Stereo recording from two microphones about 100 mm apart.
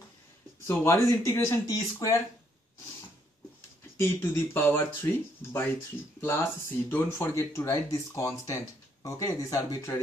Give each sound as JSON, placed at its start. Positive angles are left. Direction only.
{"t": 0.7, "sound": "speech", "side_deg": 30}
{"t": 4.0, "sound": "speech", "side_deg": 25}
{"t": 6.2, "sound": "speech", "side_deg": 25}